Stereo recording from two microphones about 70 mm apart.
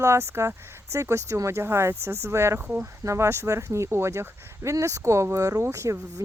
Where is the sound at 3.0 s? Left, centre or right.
Right.